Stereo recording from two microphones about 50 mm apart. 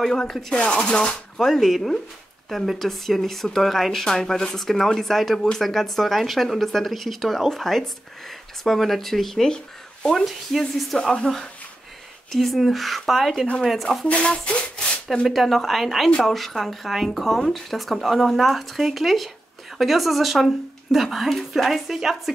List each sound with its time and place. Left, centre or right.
0.3 s a woman's voice: centre
0.6 s speech: left
1.4 s speech: centre
10.6 s a woman's voice: centre
12.3 s speech: centre
14.0 s speech: left
15.2 s speech: centre